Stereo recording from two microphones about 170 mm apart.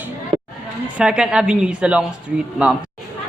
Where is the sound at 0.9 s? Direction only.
5° right (ahead or behind).